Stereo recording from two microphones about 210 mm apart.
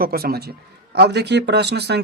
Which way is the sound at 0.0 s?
45° right (ahead or behind).